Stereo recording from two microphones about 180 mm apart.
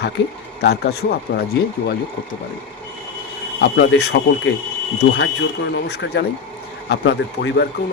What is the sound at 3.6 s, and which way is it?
Speech, 70° left (ahead or behind).